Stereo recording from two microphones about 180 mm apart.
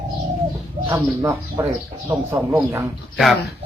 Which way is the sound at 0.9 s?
15° right (ahead or behind).